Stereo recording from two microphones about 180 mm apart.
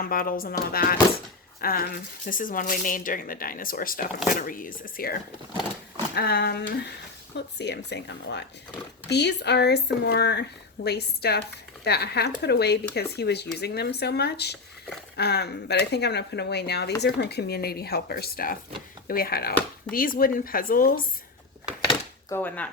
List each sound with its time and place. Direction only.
0.0 s speech: 50° left (ahead or behind)
6.1 s speech: 65° left (ahead or behind)
22.4 s speech: 10° left (ahead or behind)